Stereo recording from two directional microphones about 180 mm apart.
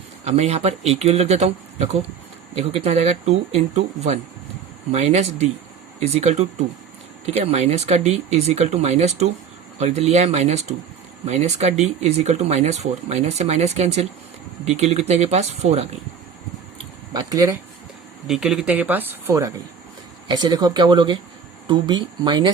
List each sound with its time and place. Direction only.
0.3 s speech: 35° right (ahead or behind)
17.2 s speech: 20° right (ahead or behind)
18.3 s speech: 5° right (ahead or behind); by 22.4 s 25° right (ahead or behind)